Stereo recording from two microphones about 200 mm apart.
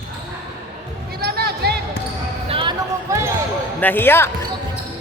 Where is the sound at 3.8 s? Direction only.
10° left (ahead or behind).